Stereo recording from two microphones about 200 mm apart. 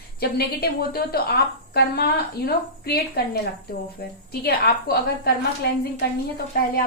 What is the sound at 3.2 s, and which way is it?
A woman's voice, 55° left (ahead or behind).